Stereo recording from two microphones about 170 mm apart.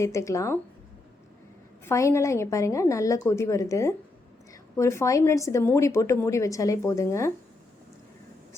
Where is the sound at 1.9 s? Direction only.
15° left (ahead or behind).